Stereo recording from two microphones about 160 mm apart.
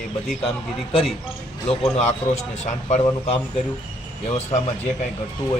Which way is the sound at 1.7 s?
40° left (ahead or behind).